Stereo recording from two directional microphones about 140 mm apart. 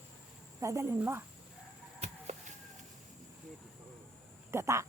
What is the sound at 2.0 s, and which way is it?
Arrow, 50° right (ahead or behind).